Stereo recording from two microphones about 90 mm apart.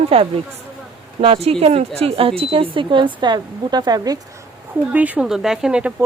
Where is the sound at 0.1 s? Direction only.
90° right; by 4.2 s 45° right (ahead or behind).